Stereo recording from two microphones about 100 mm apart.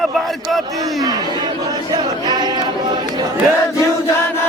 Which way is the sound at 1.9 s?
45° right (ahead or behind).